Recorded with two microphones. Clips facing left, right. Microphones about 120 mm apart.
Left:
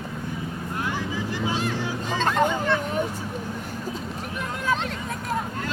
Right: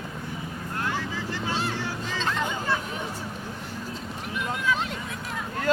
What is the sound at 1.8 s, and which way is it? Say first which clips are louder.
Hubbub: left 4 dB; 15° left (ahead or behind).